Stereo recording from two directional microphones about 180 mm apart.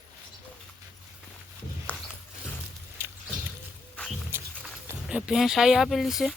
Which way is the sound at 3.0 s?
10° right (ahead or behind).